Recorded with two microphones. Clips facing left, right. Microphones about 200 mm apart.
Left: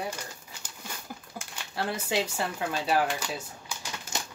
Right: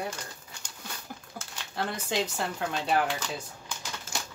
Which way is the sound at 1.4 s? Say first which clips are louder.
Even; 10° left (ahead or behind).